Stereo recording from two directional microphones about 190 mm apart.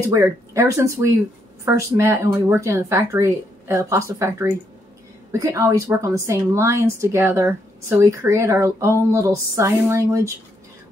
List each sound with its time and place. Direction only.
0.1 s speech: 15° right (ahead or behind)